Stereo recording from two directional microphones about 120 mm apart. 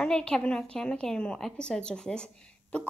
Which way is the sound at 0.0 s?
5° left (ahead or behind).